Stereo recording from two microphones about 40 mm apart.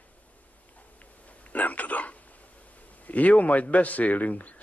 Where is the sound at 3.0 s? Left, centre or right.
Left.